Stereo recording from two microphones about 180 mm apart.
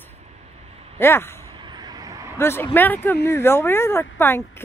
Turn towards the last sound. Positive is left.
turn(degrees=10)  # may be behind; listen again after turning